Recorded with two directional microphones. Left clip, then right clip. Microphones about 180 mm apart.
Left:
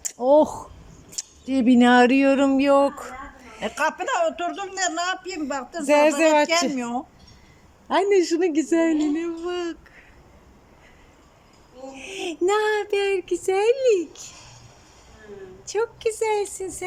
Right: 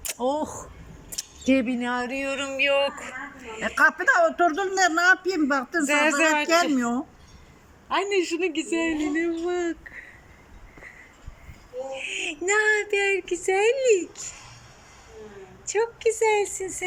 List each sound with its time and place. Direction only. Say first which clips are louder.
0.2 s speech: left 10 dB; 55° left (ahead or behind)
1.1 s keys jangling: right 7 dB; 30° left (ahead or behind)
1.5 s speech: left 13 dB; 55° left (ahead or behind); by 3.2 s 25° left (ahead or behind)
3.6 s a man's voice: right 4 dB; 10° left (ahead or behind)
5.8 s a sound: left 5 dB; 25° left (ahead or behind)
6.7 s speech: right 1 dB; 10° left (ahead or behind)
7.9 s a man's voice: left 5 dB; 35° left (ahead or behind)
9.1 s speech: right 2 dB; 10° left (ahead or behind)
11.9 s speech: left 4 dB; 25° left (ahead or behind)
15.7 s speech: right 1 dB; 15° left (ahead or behind)